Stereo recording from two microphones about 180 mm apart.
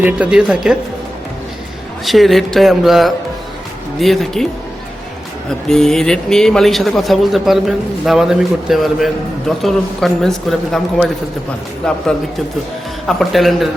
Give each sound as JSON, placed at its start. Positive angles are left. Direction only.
{"t": 0.0, "sound": "speech", "side_deg": -5}
{"t": 2.0, "sound": "speech", "side_deg": 0}
{"t": 5.5, "sound": "speech", "side_deg": 5}
{"t": 13.1, "sound": "speech", "side_deg": 0}